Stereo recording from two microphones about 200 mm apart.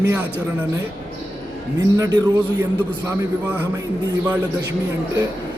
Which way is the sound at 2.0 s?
20° right (ahead or behind).